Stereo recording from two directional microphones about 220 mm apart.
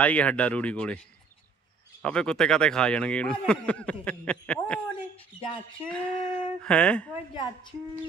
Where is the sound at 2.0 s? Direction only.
5° left (ahead or behind).